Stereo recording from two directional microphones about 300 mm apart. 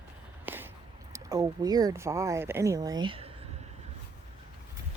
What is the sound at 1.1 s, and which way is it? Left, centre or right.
Speech, centre.